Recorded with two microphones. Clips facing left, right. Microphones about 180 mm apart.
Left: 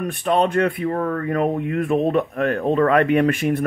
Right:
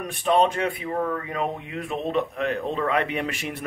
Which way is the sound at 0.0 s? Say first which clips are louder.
Left 2 dB; 55° left (ahead or behind).